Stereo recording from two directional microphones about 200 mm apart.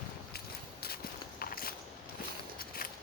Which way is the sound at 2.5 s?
50° left (ahead or behind).